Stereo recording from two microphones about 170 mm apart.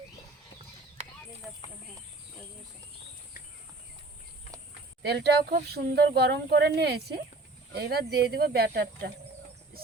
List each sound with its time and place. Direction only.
5.0 s a woman's voice: 75° right (ahead or behind)